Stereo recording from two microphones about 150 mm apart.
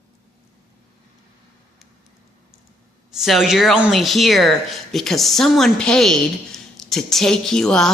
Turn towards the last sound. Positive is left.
turn(degrees=5)  # may be behind; listen again after turning